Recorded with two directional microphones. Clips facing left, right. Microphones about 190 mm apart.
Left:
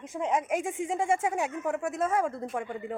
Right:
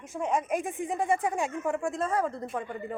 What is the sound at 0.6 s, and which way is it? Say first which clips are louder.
Speech: left 1 dB; 90° left.